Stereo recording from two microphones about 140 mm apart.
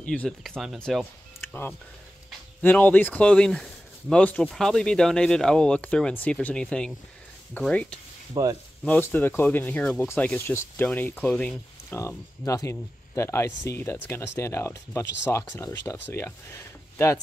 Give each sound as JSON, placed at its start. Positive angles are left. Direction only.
{"t": 0.0, "sound": "speech", "side_deg": 10}
{"t": 2.6, "sound": "speech", "side_deg": 10}
{"t": 8.3, "sound": "speech", "side_deg": -25}
{"t": 8.8, "sound": "speech", "side_deg": 10}